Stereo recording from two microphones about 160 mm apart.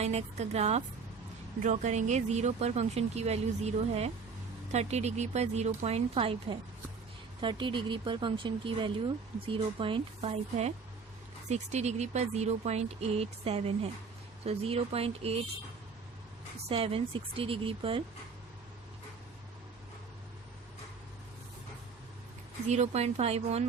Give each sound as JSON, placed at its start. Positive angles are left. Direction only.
{"t": 0.0, "sound": "speech", "side_deg": -45}
{"t": 16.6, "sound": "speech", "side_deg": -35}
{"t": 22.7, "sound": "speech", "side_deg": -45}